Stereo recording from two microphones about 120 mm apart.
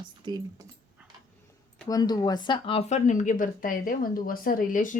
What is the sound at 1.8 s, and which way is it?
A woman's voice, 35° left (ahead or behind).